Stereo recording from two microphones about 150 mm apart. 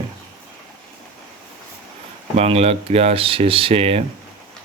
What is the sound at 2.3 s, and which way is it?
Speech, 45° right (ahead or behind).